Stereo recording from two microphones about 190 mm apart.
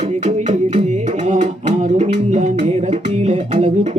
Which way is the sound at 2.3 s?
40° right (ahead or behind).